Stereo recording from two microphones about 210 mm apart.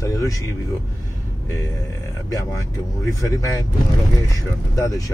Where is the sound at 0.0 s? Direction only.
15° left (ahead or behind).